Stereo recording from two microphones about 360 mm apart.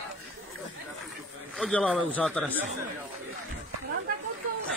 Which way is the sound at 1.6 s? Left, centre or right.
Centre.